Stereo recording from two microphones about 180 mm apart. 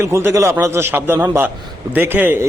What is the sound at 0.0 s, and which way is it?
A man's voice, 15° right (ahead or behind).